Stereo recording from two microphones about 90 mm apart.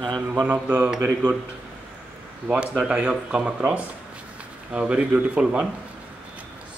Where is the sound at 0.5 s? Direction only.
20° right (ahead or behind).